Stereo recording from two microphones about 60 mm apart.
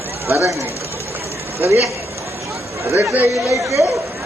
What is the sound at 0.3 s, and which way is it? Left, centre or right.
Speech, right.